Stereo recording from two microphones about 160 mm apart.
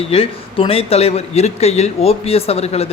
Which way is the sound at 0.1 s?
35° left (ahead or behind).